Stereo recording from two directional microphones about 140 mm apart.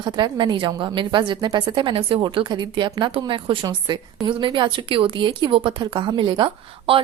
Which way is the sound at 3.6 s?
25° right (ahead or behind).